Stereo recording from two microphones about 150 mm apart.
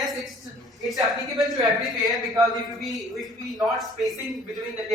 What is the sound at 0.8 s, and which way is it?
A man's voice, centre (ahead or behind).